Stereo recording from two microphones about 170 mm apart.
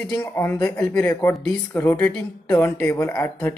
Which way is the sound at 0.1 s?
15° left (ahead or behind).